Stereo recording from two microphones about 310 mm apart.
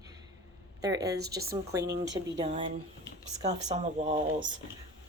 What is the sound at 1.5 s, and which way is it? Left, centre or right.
Speech, centre.